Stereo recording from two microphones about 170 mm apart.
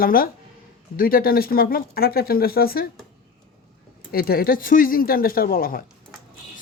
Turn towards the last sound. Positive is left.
turn(degrees=60)  # may be behind; listen again after turning